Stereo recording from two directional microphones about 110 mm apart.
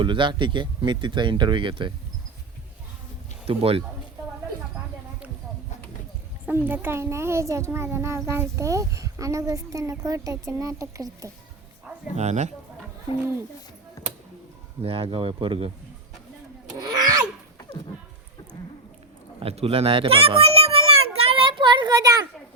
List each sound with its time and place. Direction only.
0.0 s speech: 50° right (ahead or behind)
3.4 s speech: 60° right (ahead or behind)
6.4 s a child's voice: 20° right (ahead or behind)
12.1 s speech: 90° right
14.8 s speech: 55° right (ahead or behind)
19.4 s a sound: 60° right (ahead or behind)
22.0 s a child's voice: 30° right (ahead or behind)